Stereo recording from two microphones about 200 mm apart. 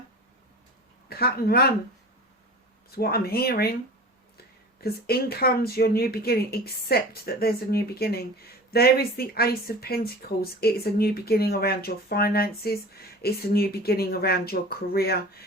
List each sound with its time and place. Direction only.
1.1 s speech: 50° left (ahead or behind)
2.9 s speech: 50° left (ahead or behind)
4.8 s speech: 50° left (ahead or behind)